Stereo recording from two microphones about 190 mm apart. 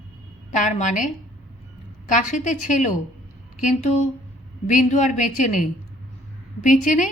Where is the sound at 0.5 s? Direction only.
40° left (ahead or behind).